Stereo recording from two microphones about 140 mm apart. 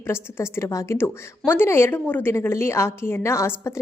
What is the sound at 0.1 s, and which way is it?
A woman's voice, 20° left (ahead or behind).